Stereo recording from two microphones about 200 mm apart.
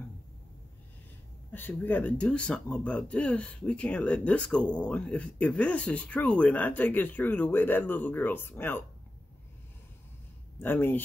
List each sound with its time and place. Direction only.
1.5 s speech: 10° left (ahead or behind)
10.6 s speech: 10° left (ahead or behind)